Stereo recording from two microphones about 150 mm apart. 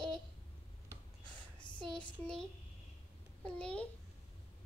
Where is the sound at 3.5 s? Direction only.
10° left (ahead or behind).